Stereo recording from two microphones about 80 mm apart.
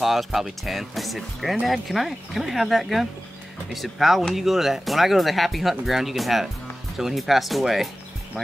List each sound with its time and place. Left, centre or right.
0.0 s speech: centre